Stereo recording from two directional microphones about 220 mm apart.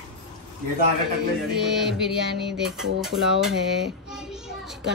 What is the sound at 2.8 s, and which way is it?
Speech, centre (ahead or behind).